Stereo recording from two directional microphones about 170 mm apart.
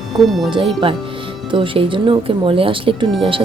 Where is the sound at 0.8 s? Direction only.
30° right (ahead or behind).